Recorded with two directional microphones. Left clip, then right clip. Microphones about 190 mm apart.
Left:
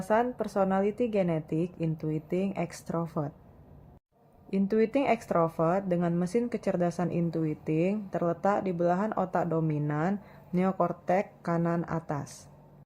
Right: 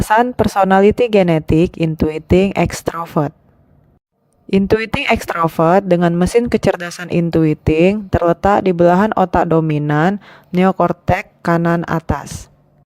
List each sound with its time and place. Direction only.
0.1 s speech: 50° right (ahead or behind)
4.5 s speech: 50° right (ahead or behind)